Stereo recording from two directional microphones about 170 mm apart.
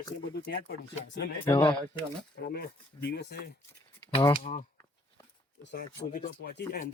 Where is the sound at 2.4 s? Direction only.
70° left (ahead or behind).